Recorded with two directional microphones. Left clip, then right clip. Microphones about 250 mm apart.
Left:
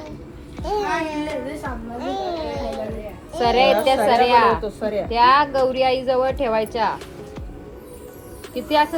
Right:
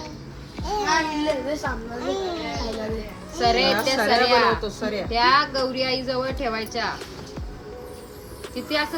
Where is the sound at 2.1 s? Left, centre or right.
Centre.